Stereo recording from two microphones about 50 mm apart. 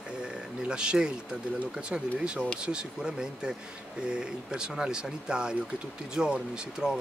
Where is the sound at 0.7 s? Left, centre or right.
Centre.